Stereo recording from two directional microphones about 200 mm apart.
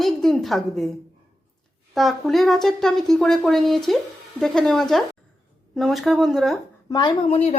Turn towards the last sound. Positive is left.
turn(degrees=30)  # may be behind; listen again after turning